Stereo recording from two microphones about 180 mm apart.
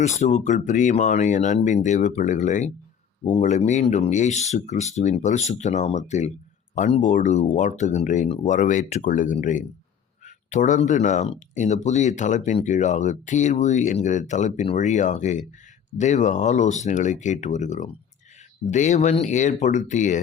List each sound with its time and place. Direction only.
0.0 s speech: 40° left (ahead or behind)